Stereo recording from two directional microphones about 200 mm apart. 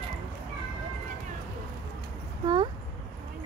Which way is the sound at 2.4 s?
25° right (ahead or behind).